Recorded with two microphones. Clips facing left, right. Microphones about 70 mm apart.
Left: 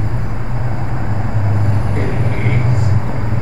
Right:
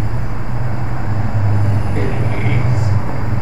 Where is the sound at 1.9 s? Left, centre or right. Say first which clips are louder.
Even; left.